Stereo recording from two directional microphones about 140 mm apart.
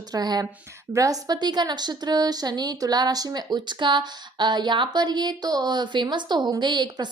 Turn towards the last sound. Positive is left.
turn(degrees=-30)  # may be behind; listen again after turning